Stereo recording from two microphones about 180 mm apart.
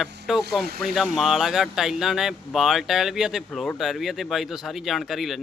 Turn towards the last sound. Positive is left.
turn(degrees=0)  # may be behind; listen again after turning